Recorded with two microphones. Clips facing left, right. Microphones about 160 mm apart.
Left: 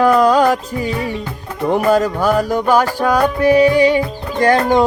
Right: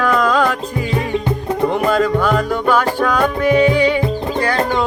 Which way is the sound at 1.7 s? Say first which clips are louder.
Left 5 dB; 40° left (ahead or behind).